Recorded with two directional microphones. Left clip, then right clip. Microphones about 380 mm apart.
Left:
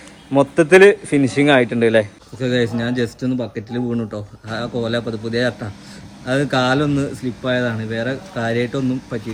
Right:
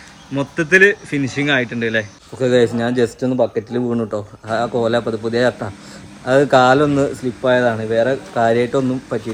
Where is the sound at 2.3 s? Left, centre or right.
Centre.